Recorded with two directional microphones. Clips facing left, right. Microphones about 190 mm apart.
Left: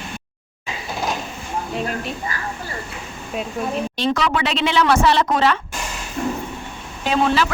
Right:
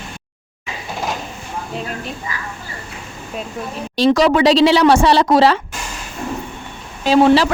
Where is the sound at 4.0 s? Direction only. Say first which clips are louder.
Right 10 dB; 35° right (ahead or behind).